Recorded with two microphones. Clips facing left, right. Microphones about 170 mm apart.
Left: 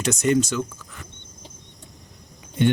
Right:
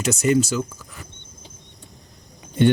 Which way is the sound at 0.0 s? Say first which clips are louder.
Right 1 dB; 5° right (ahead or behind).